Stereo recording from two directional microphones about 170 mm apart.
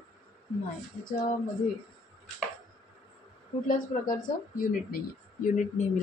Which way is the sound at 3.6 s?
50° left (ahead or behind).